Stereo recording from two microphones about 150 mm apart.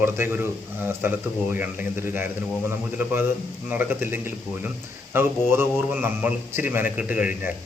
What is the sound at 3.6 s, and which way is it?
A man's voice, 10° right (ahead or behind).